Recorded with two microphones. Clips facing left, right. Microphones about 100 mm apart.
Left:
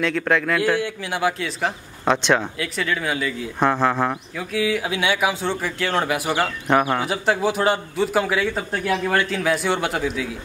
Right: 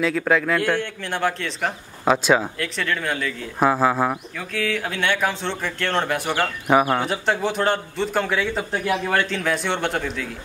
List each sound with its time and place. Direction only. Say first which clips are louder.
0.0 s a man's voice: right 1 dB; 5° right (ahead or behind)
4.4 s a man's voice: left 5 dB; 10° left (ahead or behind)
6.7 s a man's voice: right 2 dB; 5° right (ahead or behind)
8.8 s speech: left 2 dB; 10° right (ahead or behind)
9.1 s a man's voice: left 1 dB; 5° left (ahead or behind)